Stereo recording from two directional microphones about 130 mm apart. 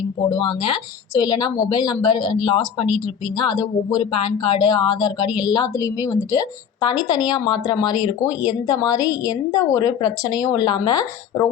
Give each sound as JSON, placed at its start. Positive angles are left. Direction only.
{"t": 0.3, "sound": "a woman's voice", "side_deg": 40}